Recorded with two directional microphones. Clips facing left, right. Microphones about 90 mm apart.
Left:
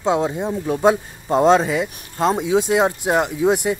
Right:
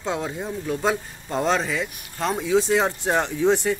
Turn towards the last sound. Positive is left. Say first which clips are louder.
# left 2 dB
turn(degrees=10)  # may be behind; listen again after turning